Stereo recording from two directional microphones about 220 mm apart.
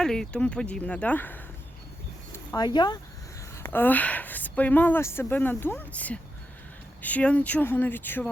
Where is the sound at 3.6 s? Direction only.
10° left (ahead or behind).